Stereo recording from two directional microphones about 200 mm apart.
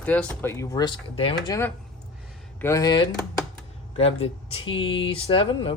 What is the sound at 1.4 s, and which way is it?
Speech, 15° left (ahead or behind).